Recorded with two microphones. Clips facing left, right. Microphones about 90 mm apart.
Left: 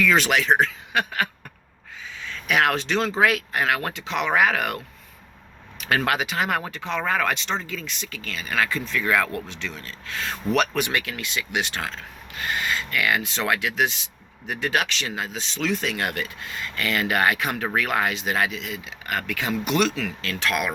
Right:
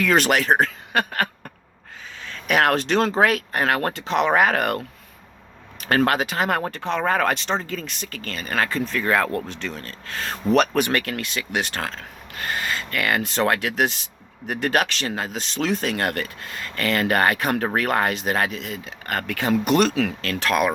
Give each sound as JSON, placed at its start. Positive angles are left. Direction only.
{"t": 0.0, "sound": "speech", "side_deg": -50}